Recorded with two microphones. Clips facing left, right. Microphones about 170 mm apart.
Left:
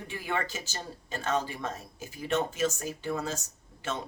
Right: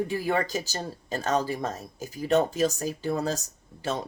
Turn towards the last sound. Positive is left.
turn(degrees=-35)  # may be behind; listen again after turning